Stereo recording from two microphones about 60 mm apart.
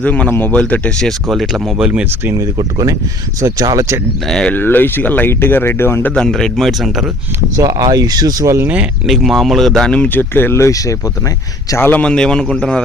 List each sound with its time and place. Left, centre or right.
0.0 s speech: left
1.3 s speech: centre
2.3 s speech: right
3.4 s speech: right
4.5 s speech: left
6.1 s speech: centre
7.5 s speech: right
9.0 s speech: centre
10.1 s speech: left
10.7 s speech: left
11.8 s speech: left
12.0 s speech: centre